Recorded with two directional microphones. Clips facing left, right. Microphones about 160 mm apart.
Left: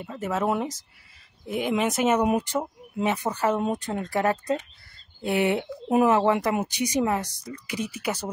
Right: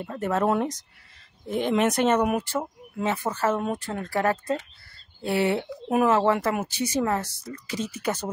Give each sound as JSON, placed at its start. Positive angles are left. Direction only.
{"t": 0.0, "sound": "speech", "side_deg": 0}
{"t": 2.2, "sound": "speech", "side_deg": 20}